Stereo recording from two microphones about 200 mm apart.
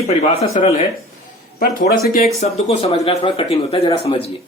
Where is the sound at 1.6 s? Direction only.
45° left (ahead or behind).